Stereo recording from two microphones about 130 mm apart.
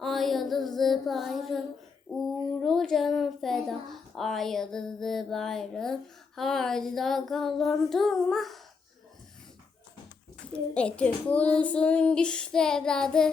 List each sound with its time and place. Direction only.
0.0 s child singing: centre (ahead or behind)
2.1 s speech: centre (ahead or behind)
10.5 s a child's voice: 10° left (ahead or behind)